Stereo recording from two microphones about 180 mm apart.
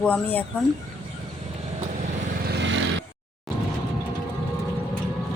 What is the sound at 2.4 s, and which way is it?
Vehicle, 75° right (ahead or behind).